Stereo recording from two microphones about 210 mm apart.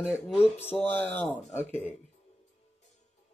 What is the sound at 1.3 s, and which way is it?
Speech, 10° left (ahead or behind).